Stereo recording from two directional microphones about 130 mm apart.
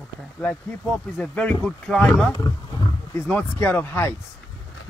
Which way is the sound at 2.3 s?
25° left (ahead or behind).